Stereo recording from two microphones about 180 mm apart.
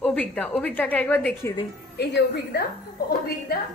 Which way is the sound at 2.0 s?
65° left (ahead or behind).